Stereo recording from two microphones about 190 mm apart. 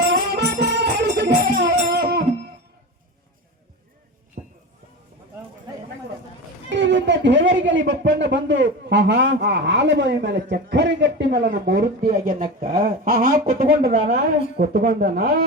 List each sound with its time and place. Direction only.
0.1 s music: 55° right (ahead or behind)
6.7 s speech: 70° right (ahead or behind); by 15.4 s 50° right (ahead or behind)